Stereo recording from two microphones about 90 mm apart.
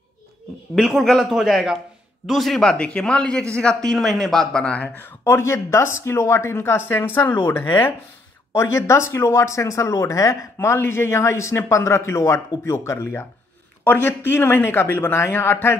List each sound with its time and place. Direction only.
0.7 s speech: centre (ahead or behind); by 15.7 s 25° left (ahead or behind)